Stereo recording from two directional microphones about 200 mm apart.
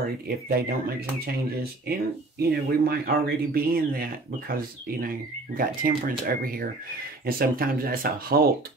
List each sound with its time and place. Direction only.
0.0 s speech: 50° right (ahead or behind)